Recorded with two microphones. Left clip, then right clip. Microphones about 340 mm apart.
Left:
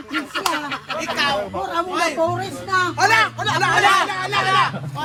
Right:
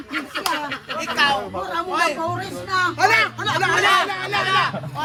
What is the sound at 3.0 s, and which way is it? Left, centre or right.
Speech, centre.